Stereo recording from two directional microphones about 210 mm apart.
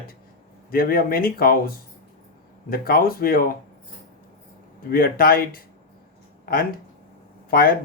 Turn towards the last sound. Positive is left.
turn(degrees=45)  # may be behind; listen again after turning